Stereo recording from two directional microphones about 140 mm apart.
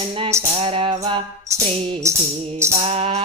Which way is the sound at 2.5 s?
20° right (ahead or behind).